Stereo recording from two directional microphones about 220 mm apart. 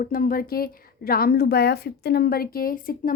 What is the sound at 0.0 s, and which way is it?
A woman's voice, 40° left (ahead or behind).